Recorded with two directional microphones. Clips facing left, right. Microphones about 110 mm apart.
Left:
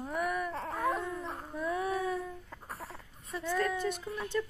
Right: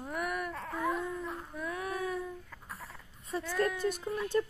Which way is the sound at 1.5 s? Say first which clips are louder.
Left 6 dB; centre (ahead or behind).